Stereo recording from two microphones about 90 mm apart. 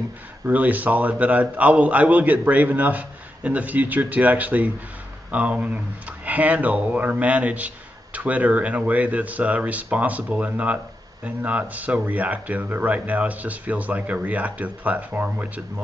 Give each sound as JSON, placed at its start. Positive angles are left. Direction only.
{"t": 0.5, "sound": "speech", "side_deg": -20}